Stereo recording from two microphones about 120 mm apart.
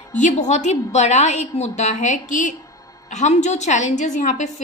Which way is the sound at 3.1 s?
80° left.